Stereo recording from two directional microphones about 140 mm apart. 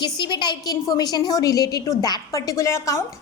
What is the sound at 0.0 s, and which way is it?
A woman's voice, 35° left (ahead or behind).